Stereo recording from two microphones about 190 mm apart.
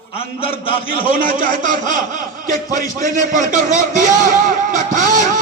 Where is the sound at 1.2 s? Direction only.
45° right (ahead or behind).